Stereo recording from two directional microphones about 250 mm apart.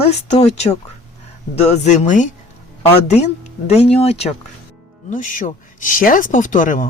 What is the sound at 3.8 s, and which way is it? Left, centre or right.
Speech, left.